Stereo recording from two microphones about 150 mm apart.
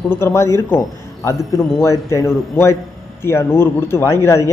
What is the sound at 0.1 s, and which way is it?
A man's voice, 15° left (ahead or behind).